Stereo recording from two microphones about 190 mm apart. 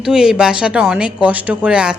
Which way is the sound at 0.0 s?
5° right (ahead or behind).